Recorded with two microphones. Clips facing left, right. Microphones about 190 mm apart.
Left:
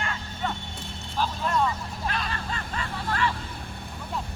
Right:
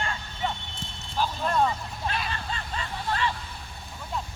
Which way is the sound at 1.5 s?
35° right (ahead or behind).